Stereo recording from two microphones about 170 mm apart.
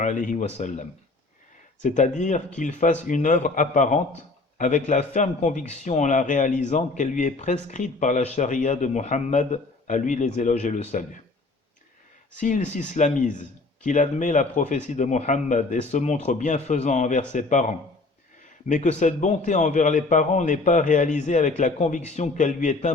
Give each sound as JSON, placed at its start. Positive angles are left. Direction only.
{"t": 0.0, "sound": "a man's voice", "side_deg": 50}
{"t": 12.4, "sound": "a man's voice", "side_deg": 50}